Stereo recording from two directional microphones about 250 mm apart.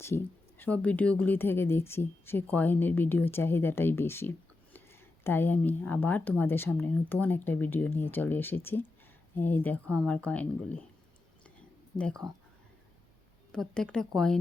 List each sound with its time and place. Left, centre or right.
0.6 s a woman's voice: centre
11.9 s speech: centre
13.5 s speech: centre